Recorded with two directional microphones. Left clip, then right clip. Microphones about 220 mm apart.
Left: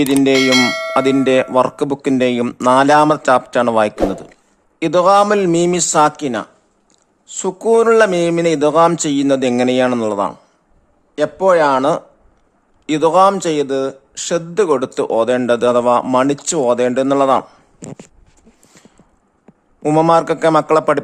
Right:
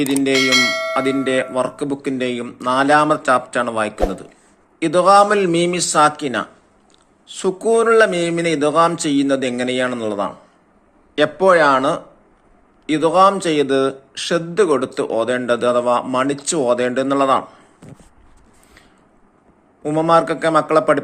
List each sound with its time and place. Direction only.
0.0 s a man's voice: 40° left (ahead or behind)
0.3 s speech: centre (ahead or behind)
1.2 s a man's voice: 40° left (ahead or behind)
11.1 s a man's voice: 25° left (ahead or behind)
19.8 s a man's voice: 40° left (ahead or behind)